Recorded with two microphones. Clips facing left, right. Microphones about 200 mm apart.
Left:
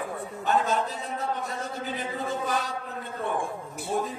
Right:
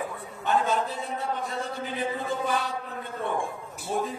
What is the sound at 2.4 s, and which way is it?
Speech, 40° left (ahead or behind).